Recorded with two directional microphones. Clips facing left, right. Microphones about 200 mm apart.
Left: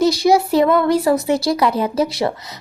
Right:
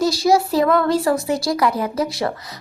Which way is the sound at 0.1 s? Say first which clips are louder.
Left 2 dB; 20° left (ahead or behind).